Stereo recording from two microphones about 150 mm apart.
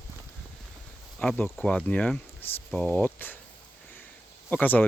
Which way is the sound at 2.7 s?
5° left (ahead or behind).